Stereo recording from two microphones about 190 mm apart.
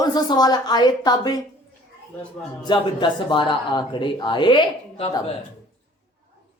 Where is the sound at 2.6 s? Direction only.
25° left (ahead or behind).